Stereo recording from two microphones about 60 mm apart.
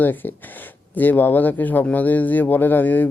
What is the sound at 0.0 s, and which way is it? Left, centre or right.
Speech, left.